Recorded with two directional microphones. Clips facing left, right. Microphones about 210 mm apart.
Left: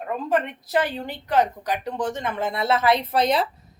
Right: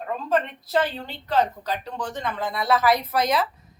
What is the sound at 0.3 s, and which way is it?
A woman's voice, 15° left (ahead or behind).